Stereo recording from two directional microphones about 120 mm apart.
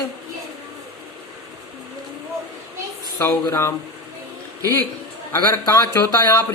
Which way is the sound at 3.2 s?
20° left (ahead or behind).